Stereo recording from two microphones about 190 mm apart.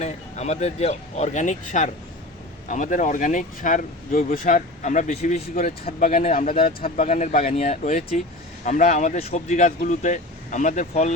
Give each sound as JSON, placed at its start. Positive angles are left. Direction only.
{"t": 0.0, "sound": "speech", "side_deg": 35}